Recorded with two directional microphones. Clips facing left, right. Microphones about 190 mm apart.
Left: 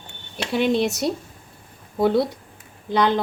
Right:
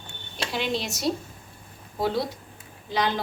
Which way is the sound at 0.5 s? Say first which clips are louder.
Left 9 dB; 55° left (ahead or behind).